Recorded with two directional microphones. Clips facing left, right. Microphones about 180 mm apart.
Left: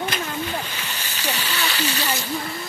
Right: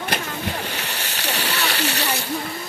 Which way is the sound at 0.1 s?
70° right (ahead or behind).